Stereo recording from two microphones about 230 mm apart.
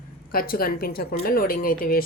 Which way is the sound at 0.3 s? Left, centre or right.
Left.